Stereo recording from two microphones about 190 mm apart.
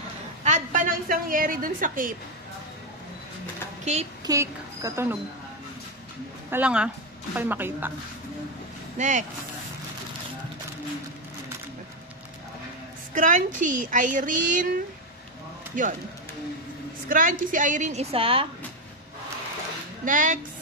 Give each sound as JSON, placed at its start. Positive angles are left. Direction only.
{"t": 0.4, "sound": "a woman's voice", "side_deg": -40}
{"t": 4.2, "sound": "speech", "side_deg": -15}
{"t": 6.5, "sound": "a woman's voice", "side_deg": -5}
{"t": 8.9, "sound": "speech", "side_deg": -40}
{"t": 13.1, "sound": "speech", "side_deg": -40}
{"t": 15.7, "sound": "speech", "side_deg": -45}
{"t": 17.1, "sound": "a woman's voice", "side_deg": -45}
{"t": 20.1, "sound": "speech", "side_deg": -45}